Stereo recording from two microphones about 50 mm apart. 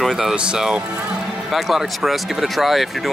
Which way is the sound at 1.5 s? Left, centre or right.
Centre.